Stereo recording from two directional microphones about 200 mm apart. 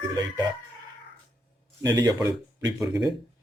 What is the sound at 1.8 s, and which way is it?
A man's voice, 15° right (ahead or behind).